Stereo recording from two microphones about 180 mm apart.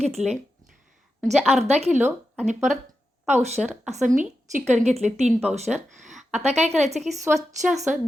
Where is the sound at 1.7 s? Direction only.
35° right (ahead or behind).